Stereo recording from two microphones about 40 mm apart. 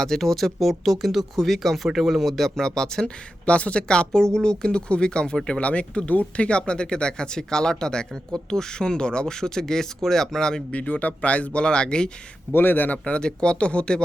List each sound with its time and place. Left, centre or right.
0.0 s speech: centre
2.6 s speech: centre
3.4 s speech: left
5.5 s speech: left; by 10.6 s centre
10.7 s a man's voice: left
11.6 s speech: left
12.5 s a man's voice: left
13.1 s speech: left